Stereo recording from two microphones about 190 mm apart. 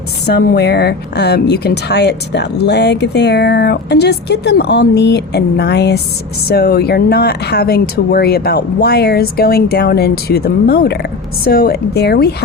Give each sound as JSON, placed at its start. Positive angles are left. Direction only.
{"t": 0.3, "sound": "speech", "side_deg": 60}